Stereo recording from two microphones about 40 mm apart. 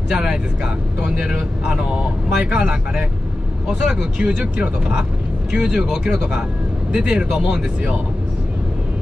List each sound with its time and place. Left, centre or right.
0.1 s speech: centre
4.4 s speech: right